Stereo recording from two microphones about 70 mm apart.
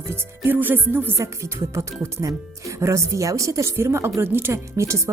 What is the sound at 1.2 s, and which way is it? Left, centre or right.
Speech, right.